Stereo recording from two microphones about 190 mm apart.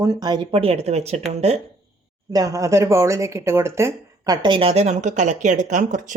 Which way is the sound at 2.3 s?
20° right (ahead or behind).